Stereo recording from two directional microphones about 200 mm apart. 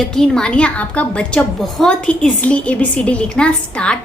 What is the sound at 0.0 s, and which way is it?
A woman's voice, 5° left (ahead or behind).